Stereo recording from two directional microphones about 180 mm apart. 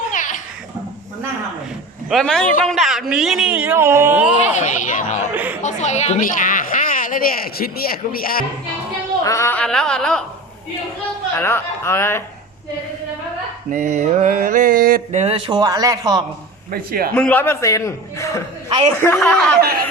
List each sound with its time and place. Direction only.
0.1 s a sound: 45° left (ahead or behind)
2.0 s speech: centre (ahead or behind)
4.5 s speech: 45° left (ahead or behind)
5.3 s speech: 10° right (ahead or behind)
5.6 s speech: 40° left (ahead or behind)
9.2 s speech: 15° left (ahead or behind)
11.3 s a man's voice: 15° left (ahead or behind)
13.7 s a sound: 45° right (ahead or behind)
15.2 s speech: 30° right (ahead or behind)
16.7 s speech: 55° right (ahead or behind)
17.2 s a man's voice: 10° left (ahead or behind)